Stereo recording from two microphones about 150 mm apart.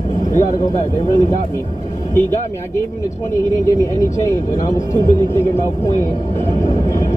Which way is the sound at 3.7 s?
20° left (ahead or behind).